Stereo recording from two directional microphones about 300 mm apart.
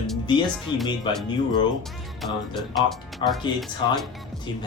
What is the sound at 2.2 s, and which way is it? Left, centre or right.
Speech, centre.